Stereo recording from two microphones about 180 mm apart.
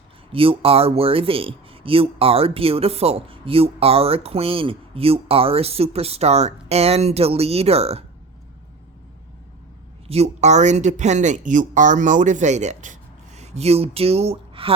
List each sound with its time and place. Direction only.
0.3 s speech: 30° right (ahead or behind)
10.1 s speech: 35° right (ahead or behind)